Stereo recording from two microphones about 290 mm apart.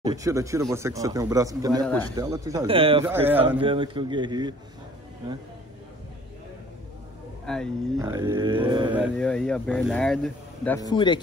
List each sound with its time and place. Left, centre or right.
0.0 s a man's voice: centre
3.1 s a man's voice: centre
7.4 s speech: centre
8.0 s a man's voice: centre
8.9 s speech: centre